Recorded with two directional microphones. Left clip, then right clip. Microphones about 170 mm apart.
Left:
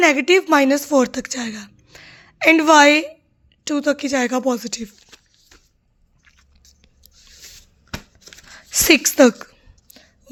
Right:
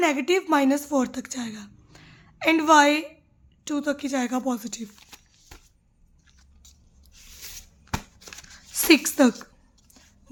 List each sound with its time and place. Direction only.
0.0 s a woman's voice: 35° left (ahead or behind)
8.5 s a woman's voice: 45° left (ahead or behind)
9.4 s a sound: 30° left (ahead or behind)